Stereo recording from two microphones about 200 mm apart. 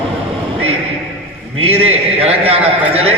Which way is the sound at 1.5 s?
30° right (ahead or behind).